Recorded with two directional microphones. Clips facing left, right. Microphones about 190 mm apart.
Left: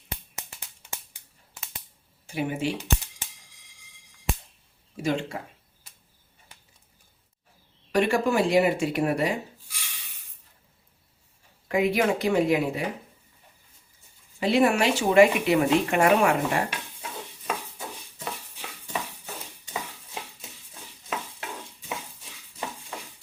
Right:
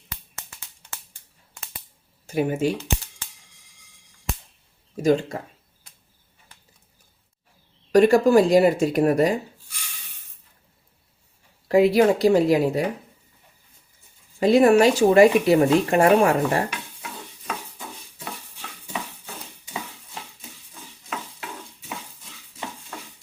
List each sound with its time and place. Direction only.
1.6 s a sound: 5° left (ahead or behind)
2.2 s speech: 40° right (ahead or behind)
2.7 s music: 15° left (ahead or behind)
5.0 s speech: 40° right (ahead or behind)
7.9 s speech: 40° right (ahead or behind)
11.7 s speech: 35° right (ahead or behind)
14.3 s speech: 45° right (ahead or behind)